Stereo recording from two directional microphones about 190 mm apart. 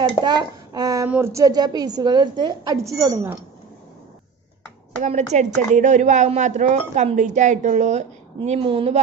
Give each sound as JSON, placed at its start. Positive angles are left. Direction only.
{"t": 0.2, "sound": "a child's voice", "side_deg": -20}
{"t": 5.0, "sound": "speech", "side_deg": -40}